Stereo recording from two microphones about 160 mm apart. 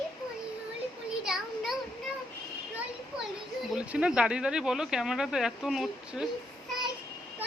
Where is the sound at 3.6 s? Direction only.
5° right (ahead or behind).